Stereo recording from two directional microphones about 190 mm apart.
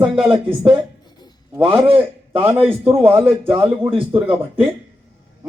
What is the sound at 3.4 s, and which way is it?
A man's voice, 20° right (ahead or behind).